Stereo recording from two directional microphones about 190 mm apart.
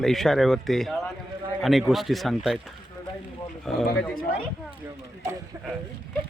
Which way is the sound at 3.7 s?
Centre (ahead or behind).